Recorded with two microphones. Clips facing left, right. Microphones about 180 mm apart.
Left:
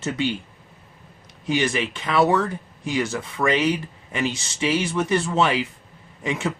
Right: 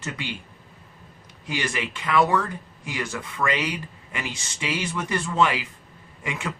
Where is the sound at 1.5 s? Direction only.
25° left (ahead or behind).